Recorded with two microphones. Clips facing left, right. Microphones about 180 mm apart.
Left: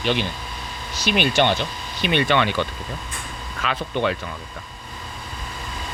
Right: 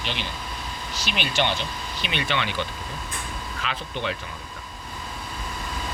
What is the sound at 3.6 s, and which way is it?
Speech, 55° left (ahead or behind).